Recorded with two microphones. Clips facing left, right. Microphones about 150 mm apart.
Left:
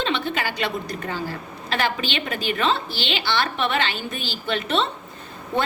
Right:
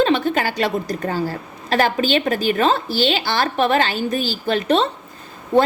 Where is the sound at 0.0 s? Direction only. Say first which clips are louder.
Right 8 dB; 45° right (ahead or behind).